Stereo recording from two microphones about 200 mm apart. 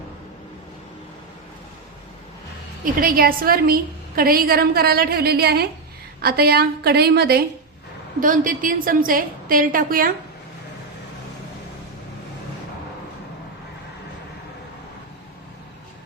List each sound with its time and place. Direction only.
2.8 s a woman's voice: 45° right (ahead or behind)
8.2 s a woman's voice: 40° right (ahead or behind)